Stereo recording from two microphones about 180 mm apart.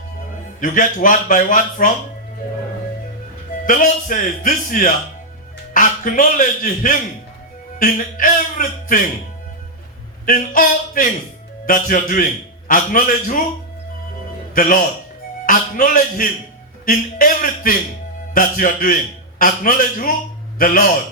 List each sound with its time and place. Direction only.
0.6 s a man's voice: 45° left (ahead or behind)
3.7 s a man's voice: 50° left (ahead or behind)
10.2 s a man's voice: 50° left (ahead or behind)
14.5 s a man's voice: 50° left (ahead or behind)